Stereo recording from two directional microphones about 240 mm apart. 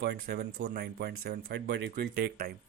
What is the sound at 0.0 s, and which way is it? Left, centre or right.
Speech, right.